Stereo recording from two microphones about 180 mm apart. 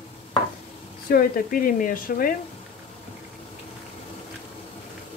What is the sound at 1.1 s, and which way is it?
Speech, 55° left (ahead or behind).